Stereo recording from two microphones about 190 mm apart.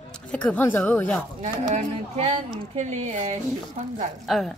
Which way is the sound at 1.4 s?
40° right (ahead or behind).